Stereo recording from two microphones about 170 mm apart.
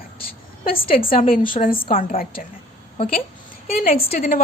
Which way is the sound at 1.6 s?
40° left (ahead or behind).